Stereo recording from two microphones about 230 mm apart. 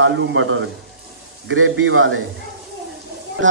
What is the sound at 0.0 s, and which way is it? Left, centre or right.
A man's voice, right.